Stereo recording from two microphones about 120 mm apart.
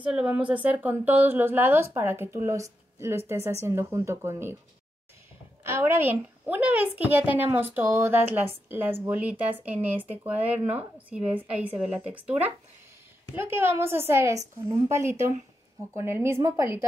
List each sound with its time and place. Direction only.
0.0 s a woman's voice: 10° right (ahead or behind)
5.6 s a woman's voice: 20° right (ahead or behind)